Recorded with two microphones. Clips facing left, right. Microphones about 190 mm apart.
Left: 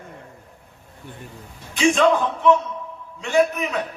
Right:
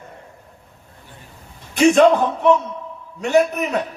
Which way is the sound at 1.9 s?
55° right (ahead or behind).